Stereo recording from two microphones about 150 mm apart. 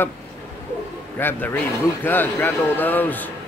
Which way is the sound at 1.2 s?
15° left (ahead or behind).